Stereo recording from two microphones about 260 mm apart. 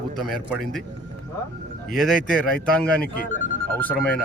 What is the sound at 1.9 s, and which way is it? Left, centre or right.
Speech, centre.